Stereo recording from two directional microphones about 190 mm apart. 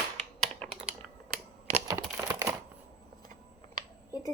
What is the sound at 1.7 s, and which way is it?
Typing, 15° right (ahead or behind).